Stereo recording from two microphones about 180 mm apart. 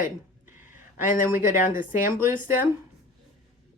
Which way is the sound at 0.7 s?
45° left (ahead or behind).